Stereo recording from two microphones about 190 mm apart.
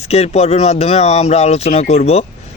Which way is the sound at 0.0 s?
35° left (ahead or behind).